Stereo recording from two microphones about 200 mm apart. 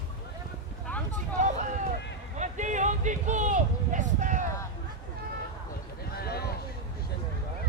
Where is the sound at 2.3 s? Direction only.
35° right (ahead or behind).